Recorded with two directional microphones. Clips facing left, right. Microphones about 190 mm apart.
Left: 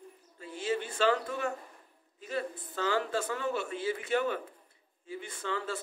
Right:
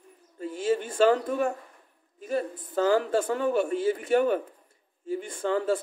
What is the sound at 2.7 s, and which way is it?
Speech, 45° right (ahead or behind).